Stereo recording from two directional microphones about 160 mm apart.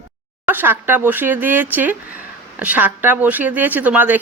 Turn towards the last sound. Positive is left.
turn(degrees=-10)  # may be behind; listen again after turning